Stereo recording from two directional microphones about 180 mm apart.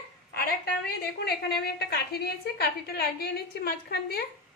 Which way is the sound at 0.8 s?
60° left (ahead or behind).